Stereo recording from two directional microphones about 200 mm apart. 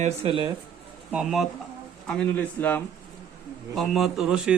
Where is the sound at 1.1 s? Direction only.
5° right (ahead or behind).